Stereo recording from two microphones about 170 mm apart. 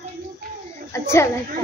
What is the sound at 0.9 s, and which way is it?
Speech, 15° left (ahead or behind).